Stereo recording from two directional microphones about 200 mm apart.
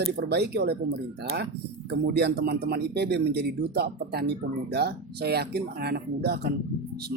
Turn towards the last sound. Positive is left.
turn(degrees=-55)  # may be behind; listen again after turning